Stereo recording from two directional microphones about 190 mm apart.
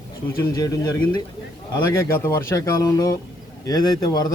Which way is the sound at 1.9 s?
15° left (ahead or behind).